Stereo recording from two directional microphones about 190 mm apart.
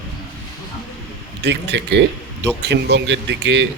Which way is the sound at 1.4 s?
65° right (ahead or behind).